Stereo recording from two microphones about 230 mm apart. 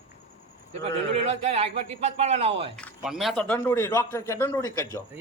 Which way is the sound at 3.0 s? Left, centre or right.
Centre.